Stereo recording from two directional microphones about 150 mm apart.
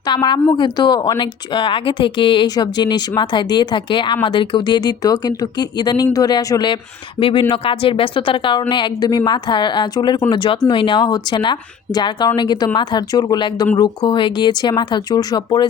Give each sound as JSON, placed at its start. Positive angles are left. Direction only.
{"t": 0.0, "sound": "a woman's voice", "side_deg": 30}